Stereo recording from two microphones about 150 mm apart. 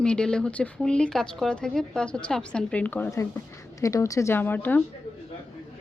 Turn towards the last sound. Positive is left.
turn(degrees=15)  # may be behind; listen again after turning